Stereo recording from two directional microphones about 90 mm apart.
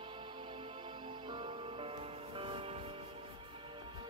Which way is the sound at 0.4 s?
75° right (ahead or behind).